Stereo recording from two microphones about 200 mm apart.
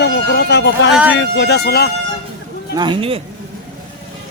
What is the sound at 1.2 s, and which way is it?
Speech, 60° left (ahead or behind).